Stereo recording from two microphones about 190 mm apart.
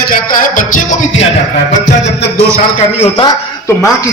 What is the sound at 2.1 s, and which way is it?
Speech, 65° left (ahead or behind).